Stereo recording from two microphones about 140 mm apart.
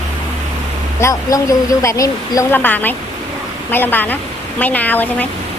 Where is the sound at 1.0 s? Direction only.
25° left (ahead or behind).